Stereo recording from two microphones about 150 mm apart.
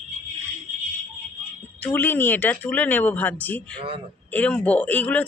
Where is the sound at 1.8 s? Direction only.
10° left (ahead or behind).